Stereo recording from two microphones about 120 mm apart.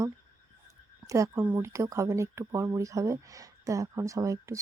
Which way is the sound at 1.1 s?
25° right (ahead or behind).